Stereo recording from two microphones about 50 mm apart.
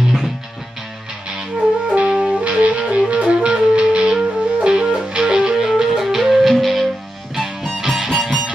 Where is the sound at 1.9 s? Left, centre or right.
Right.